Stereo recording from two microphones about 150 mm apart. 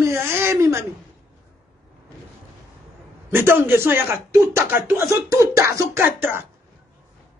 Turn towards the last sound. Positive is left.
turn(degrees=-15)  # may be behind; listen again after turning